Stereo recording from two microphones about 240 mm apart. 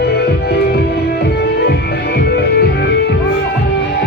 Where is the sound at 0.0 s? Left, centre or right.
Left.